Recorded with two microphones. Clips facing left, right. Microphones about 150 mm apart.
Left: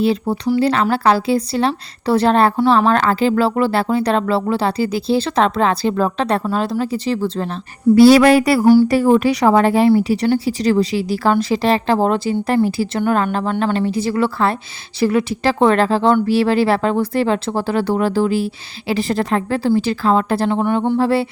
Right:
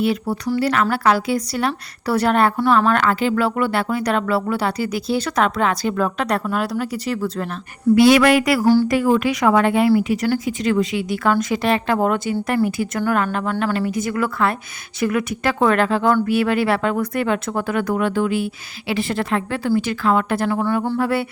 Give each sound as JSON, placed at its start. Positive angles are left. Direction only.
{"t": 0.0, "sound": "speech", "side_deg": 30}
{"t": 8.6, "sound": "speech", "side_deg": 15}
{"t": 8.9, "sound": "speech", "side_deg": 30}